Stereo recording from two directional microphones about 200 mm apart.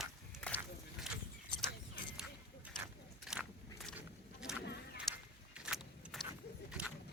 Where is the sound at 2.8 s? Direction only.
5° right (ahead or behind).